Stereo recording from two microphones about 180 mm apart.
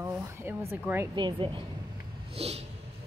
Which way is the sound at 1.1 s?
25° right (ahead or behind).